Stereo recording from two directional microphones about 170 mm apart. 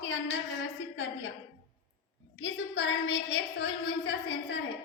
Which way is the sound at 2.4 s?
90° left.